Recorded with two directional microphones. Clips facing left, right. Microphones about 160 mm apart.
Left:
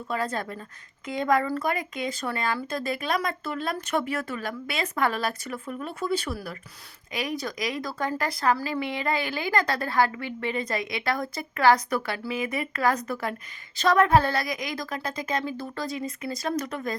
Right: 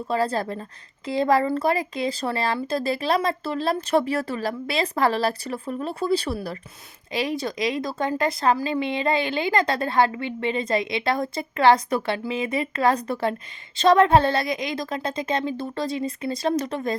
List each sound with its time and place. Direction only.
0.1 s speech: 30° right (ahead or behind)